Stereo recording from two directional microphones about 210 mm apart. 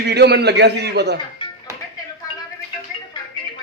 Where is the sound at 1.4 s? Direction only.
25° left (ahead or behind).